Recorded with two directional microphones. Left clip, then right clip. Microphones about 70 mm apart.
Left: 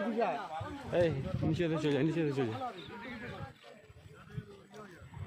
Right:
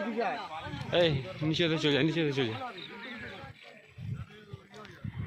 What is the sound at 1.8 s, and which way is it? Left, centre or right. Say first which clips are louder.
Speech: right 4 dB; right.